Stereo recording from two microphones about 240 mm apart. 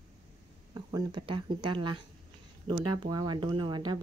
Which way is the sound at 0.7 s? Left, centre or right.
Centre.